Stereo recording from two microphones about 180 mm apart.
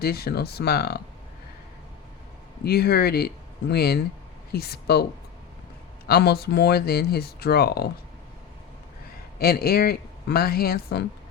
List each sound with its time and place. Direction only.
0.0 s speech: 60° left (ahead or behind)
2.6 s speech: 60° left (ahead or behind)
6.1 s speech: 65° left (ahead or behind)
9.4 s speech: 60° left (ahead or behind)